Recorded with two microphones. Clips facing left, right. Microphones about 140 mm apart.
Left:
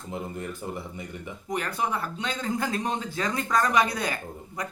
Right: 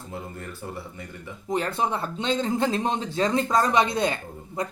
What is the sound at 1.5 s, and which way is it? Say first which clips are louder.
Speech: right 4 dB; 25° right (ahead or behind).